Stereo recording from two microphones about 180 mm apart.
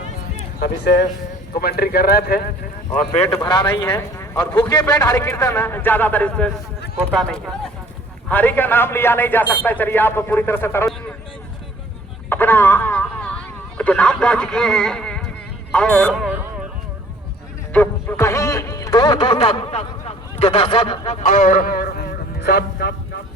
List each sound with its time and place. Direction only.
0.6 s speech: 65° left (ahead or behind)
3.2 s speech: 20° left (ahead or behind)
3.8 s a man's voice: 15° left (ahead or behind)
12.3 s a man's voice: 10° left (ahead or behind)
17.7 s a sound: 10° left (ahead or behind); by 20.1 s 35° left (ahead or behind)
20.4 s speech: 30° left (ahead or behind)
21.2 s speech: 45° left (ahead or behind); by 23.0 s 60° left (ahead or behind)